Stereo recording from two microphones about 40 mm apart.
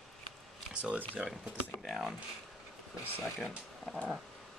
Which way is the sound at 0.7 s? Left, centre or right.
Right.